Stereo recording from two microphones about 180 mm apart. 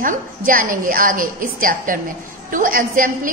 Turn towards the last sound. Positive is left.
turn(degrees=-50)  # may be behind; listen again after turning